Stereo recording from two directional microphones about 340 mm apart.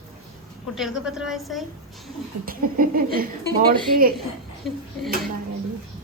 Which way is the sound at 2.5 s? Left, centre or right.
Right.